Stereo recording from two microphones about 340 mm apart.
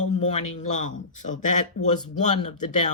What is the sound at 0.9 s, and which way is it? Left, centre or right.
Speech, left.